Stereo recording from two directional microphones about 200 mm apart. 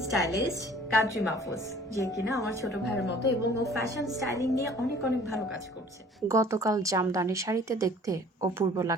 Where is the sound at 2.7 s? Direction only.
60° left (ahead or behind).